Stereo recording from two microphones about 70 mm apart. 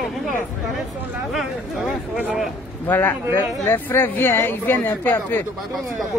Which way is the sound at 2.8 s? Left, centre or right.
Left.